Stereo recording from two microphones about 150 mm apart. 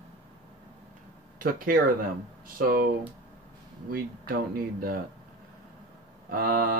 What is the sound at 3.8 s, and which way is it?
Speech, 70° right (ahead or behind).